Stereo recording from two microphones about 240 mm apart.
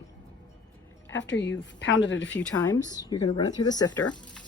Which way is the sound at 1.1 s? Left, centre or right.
Left.